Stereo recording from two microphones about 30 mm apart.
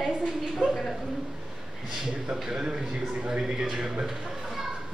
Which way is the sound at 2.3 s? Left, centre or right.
Centre.